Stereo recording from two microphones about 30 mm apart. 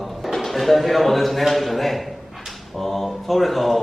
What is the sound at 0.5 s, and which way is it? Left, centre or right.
A man's voice, centre.